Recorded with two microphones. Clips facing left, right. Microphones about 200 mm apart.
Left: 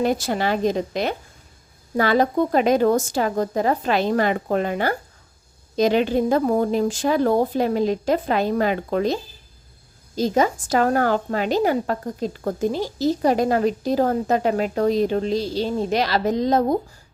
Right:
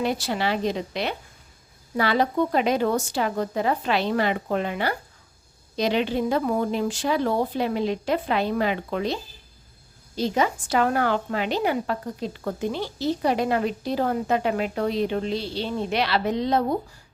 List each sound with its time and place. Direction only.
0.0 s speech: 45° left (ahead or behind)
10.2 s a woman's voice: 40° left (ahead or behind)